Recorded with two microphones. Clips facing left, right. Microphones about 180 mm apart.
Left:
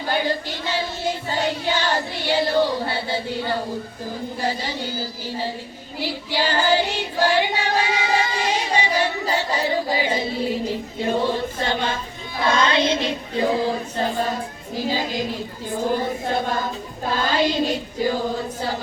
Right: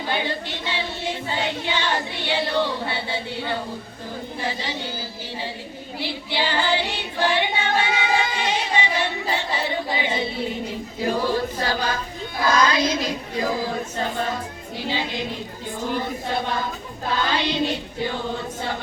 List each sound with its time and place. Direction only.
0.1 s child singing: 40° left (ahead or behind)
4.4 s a sound: 40° left (ahead or behind)
6.0 s child singing: 40° left (ahead or behind)
10.7 s a woman's voice: 25° left (ahead or behind)
14.8 s a sound: 40° left (ahead or behind)
17.3 s female singing: 45° left (ahead or behind)